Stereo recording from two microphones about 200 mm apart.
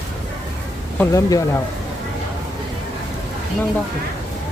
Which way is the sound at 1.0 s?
15° left (ahead or behind).